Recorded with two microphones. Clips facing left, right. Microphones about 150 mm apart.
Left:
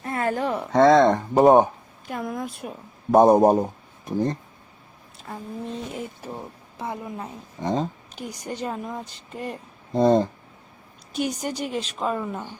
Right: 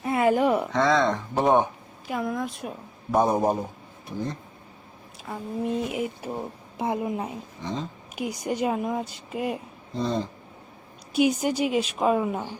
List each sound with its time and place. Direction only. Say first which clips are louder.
0.0 s a sound: right 4 dB; 10° right (ahead or behind)
0.7 s speech: left 7 dB; 45° left (ahead or behind)
2.0 s a woman's voice: right 2 dB; centre (ahead or behind)
3.1 s a man's voice: left 7 dB; 45° left (ahead or behind)
5.3 s speech: right 4 dB; 10° right (ahead or behind)
7.6 s speech: left 7 dB; 50° left (ahead or behind)
8.1 s speech: right 5 dB; 10° right (ahead or behind)
9.9 s speech: left 9 dB; 50° left (ahead or behind)
11.1 s speech: right 5 dB; 10° right (ahead or behind)